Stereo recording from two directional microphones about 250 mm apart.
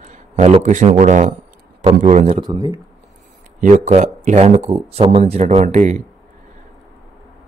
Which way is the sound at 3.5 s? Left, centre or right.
Right.